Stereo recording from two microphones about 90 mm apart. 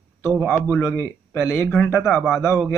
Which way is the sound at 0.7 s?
25° left (ahead or behind).